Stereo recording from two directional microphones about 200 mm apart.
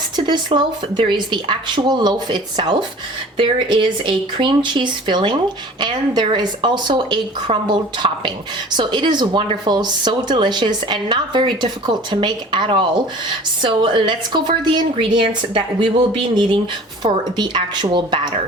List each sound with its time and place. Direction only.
0.3 s speech: 20° right (ahead or behind)